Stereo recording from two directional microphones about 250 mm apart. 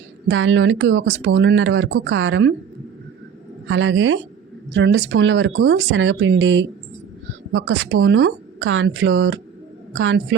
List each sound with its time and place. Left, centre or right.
0.3 s speech: right
3.7 s speech: right